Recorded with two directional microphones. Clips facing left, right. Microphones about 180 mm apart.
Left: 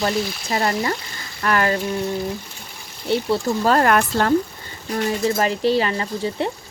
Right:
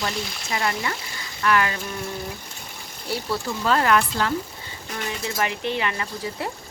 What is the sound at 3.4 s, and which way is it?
Speech, 40° left (ahead or behind).